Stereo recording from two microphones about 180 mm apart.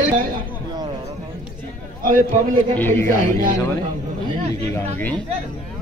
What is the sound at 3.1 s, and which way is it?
Speech, 50° right (ahead or behind).